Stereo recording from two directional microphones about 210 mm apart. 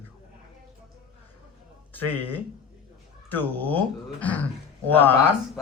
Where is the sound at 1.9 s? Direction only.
10° left (ahead or behind).